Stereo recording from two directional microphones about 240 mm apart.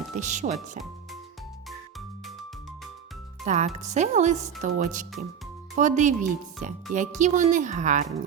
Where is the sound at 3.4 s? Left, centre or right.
Right.